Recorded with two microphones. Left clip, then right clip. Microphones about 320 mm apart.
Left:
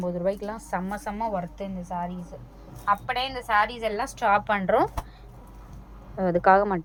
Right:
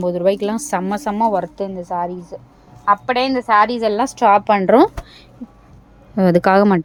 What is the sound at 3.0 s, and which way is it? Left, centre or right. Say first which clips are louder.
A woman's voice: right 11 dB; centre.